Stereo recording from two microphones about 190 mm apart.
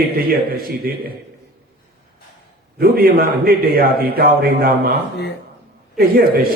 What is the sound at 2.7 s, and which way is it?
A man's voice, 50° right (ahead or behind).